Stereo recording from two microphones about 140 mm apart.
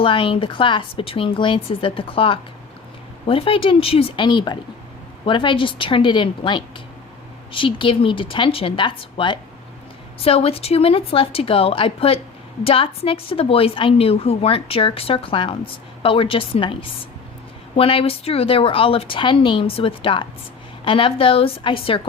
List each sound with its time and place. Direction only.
0.0 s a woman's voice: 40° left (ahead or behind)
17.7 s a woman's voice: 40° left (ahead or behind)